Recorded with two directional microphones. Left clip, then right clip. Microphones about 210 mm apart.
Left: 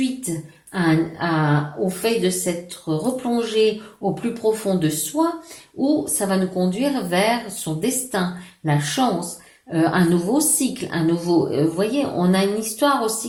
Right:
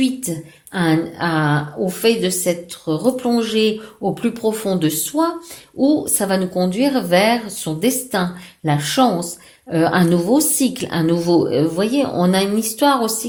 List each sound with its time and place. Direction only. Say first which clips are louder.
0.0 s a woman's voice: right 4 dB; 45° right (ahead or behind)